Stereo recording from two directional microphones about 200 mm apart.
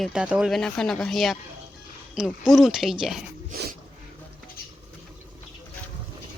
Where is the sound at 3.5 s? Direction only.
45° right (ahead or behind).